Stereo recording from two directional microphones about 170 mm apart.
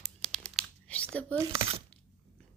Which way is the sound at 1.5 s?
35° right (ahead or behind).